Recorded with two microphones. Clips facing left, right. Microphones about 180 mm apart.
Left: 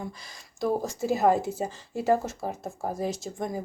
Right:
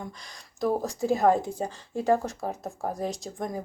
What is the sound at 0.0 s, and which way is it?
Speech, 5° left (ahead or behind).